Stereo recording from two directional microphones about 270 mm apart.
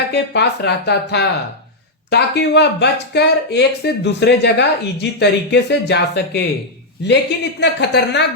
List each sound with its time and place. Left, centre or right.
0.1 s speech: left